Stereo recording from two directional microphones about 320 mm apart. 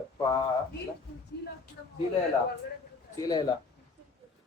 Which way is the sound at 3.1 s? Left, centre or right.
Centre.